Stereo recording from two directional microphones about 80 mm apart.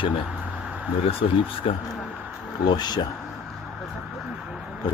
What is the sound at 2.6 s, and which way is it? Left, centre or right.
Speech, left.